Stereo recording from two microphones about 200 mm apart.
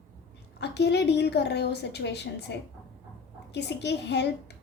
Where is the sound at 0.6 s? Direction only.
55° left (ahead or behind).